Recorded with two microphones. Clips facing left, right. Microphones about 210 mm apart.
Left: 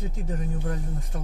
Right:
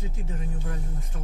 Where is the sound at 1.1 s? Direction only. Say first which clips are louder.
Left 4 dB; 45° left (ahead or behind).